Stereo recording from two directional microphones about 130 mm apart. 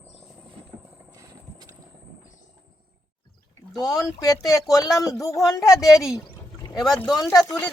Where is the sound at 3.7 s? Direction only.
30° left (ahead or behind).